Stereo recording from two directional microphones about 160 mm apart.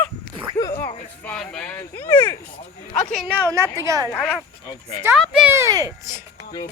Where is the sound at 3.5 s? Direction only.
15° right (ahead or behind).